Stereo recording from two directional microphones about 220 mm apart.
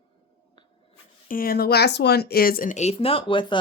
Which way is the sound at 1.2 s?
40° left (ahead or behind).